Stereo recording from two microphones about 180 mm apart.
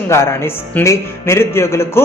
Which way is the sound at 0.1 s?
15° left (ahead or behind).